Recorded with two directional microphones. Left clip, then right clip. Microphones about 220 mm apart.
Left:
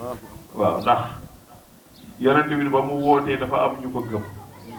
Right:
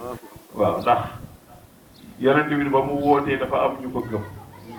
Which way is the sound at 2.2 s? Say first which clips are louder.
Even; 25° right (ahead or behind).